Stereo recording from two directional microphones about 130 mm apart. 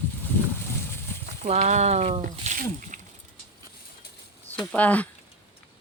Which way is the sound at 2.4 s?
75° right (ahead or behind).